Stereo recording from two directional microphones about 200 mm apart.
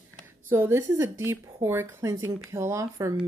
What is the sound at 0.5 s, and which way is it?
A woman's voice, 10° right (ahead or behind).